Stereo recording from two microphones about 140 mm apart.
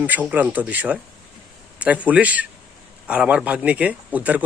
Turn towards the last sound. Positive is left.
turn(degrees=-10)  # may be behind; listen again after turning